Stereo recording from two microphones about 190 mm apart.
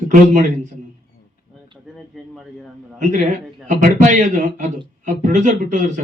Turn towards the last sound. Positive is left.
turn(degrees=-40)  # may be behind; listen again after turning